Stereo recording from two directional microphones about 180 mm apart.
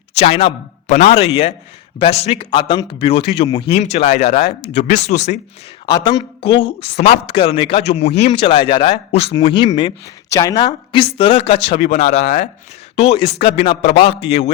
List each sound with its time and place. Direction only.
0.1 s a man's voice: 35° left (ahead or behind)
5.8 s speech: 25° left (ahead or behind)
8.3 s speech: 25° left (ahead or behind)
13.4 s a man's voice: 60° left (ahead or behind)
14.2 s speech: 35° left (ahead or behind)